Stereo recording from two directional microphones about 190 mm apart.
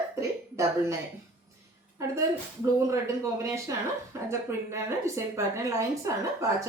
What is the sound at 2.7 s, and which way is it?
Speech, 15° right (ahead or behind).